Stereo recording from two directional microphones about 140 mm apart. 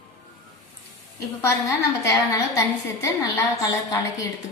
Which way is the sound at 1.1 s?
20° left (ahead or behind).